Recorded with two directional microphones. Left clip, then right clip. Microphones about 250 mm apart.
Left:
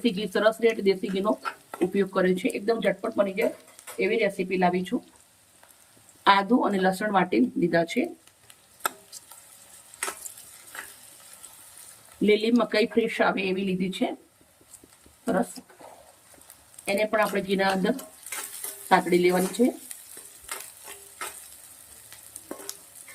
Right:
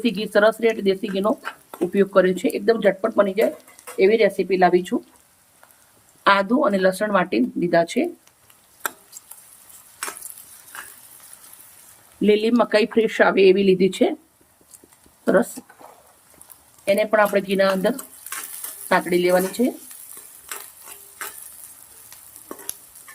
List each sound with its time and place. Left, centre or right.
0.0 s speech: centre
6.2 s speech: centre
12.2 s speech: centre
16.9 s speech: centre